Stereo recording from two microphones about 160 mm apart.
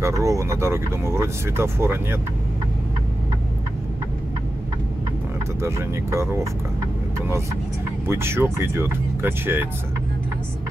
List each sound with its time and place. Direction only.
0.0 s speech: 20° right (ahead or behind)
5.6 s speech: 15° right (ahead or behind)
8.1 s speech: 15° right (ahead or behind)